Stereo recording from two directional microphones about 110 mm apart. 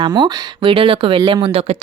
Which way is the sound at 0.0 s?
45° right (ahead or behind).